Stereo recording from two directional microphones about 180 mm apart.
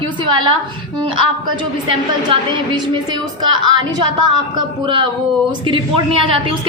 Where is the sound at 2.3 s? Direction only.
30° right (ahead or behind).